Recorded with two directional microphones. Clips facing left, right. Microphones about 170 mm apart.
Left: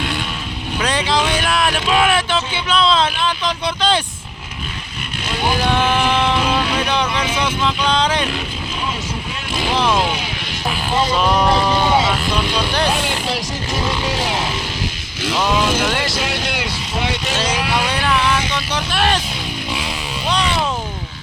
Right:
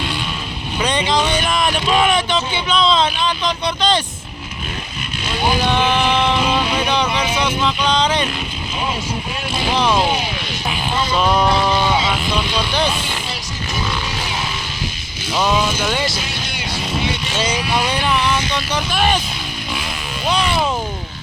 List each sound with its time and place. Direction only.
0.8 s speech: centre (ahead or behind)
5.6 s speech: 5° left (ahead or behind)
9.7 s speech: centre (ahead or behind)
11.1 s speech: centre (ahead or behind)
15.6 s speech: 90° left
17.8 s speech: centre (ahead or behind)
20.2 s speech: 5° right (ahead or behind)